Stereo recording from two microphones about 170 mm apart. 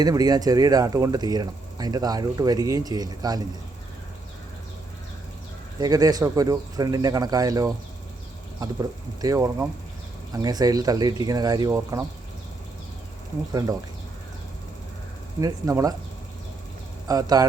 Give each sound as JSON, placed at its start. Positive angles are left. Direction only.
{"t": 0.0, "sound": "speech", "side_deg": -20}
{"t": 5.8, "sound": "speech", "side_deg": -20}
{"t": 13.5, "sound": "speech", "side_deg": -20}
{"t": 15.4, "sound": "speech", "side_deg": -20}
{"t": 17.1, "sound": "speech", "side_deg": -20}